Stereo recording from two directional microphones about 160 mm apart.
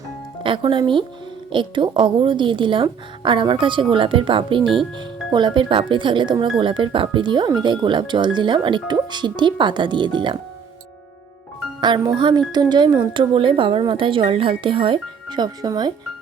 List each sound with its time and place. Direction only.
0.4 s speech: 30° right (ahead or behind)
11.8 s speech: 25° right (ahead or behind)